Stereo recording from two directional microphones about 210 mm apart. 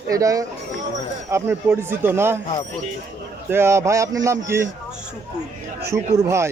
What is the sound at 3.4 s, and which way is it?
Speech, 10° right (ahead or behind).